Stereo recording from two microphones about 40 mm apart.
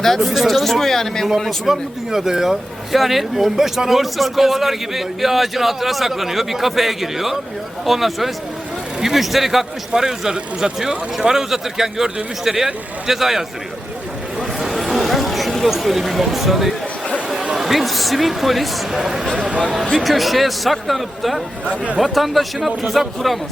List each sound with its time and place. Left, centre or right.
0.0 s speech: centre
1.6 s a man's voice: centre
14.3 s a sound: centre
17.5 s speech: centre
19.5 s speech: right
20.0 s speech: centre